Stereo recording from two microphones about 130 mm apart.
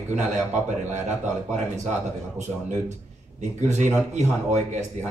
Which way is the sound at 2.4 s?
70° right (ahead or behind).